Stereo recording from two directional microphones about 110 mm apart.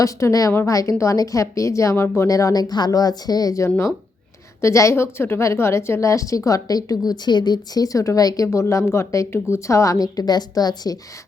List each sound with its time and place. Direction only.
0.0 s a woman's voice: 30° left (ahead or behind)